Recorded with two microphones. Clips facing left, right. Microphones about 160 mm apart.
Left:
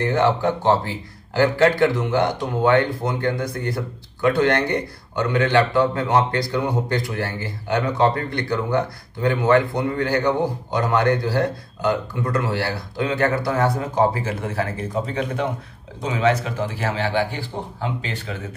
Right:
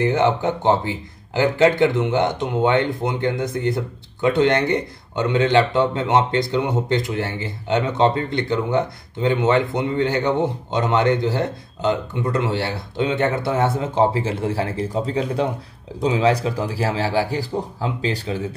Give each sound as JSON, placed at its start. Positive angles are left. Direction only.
{"t": 0.0, "sound": "a man's voice", "side_deg": -20}